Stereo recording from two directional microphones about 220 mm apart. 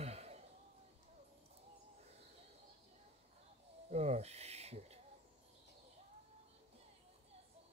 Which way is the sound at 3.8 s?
30° right (ahead or behind).